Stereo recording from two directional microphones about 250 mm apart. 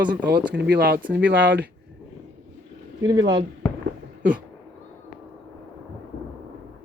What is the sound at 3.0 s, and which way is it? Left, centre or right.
Speech, centre.